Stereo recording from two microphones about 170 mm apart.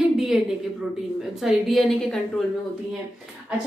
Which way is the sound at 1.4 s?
Centre (ahead or behind).